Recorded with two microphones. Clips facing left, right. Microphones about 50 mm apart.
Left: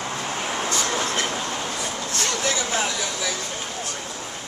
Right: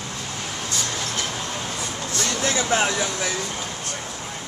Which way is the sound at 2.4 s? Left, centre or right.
Right.